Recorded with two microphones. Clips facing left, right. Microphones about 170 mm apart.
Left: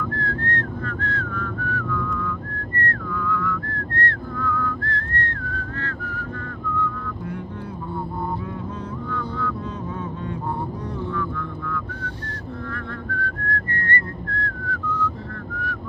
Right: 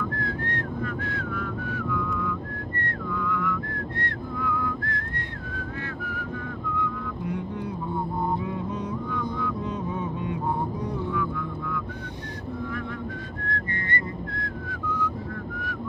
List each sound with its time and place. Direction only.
0.1 s whistling: 15° right (ahead or behind)
13.1 s whistling: 15° right (ahead or behind)